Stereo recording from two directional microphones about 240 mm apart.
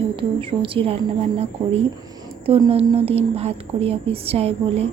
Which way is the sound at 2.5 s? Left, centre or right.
Right.